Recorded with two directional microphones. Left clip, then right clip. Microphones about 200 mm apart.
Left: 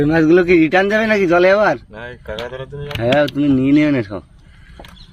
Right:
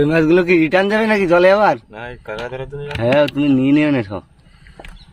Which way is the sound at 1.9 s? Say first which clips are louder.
Even; 30° right (ahead or behind).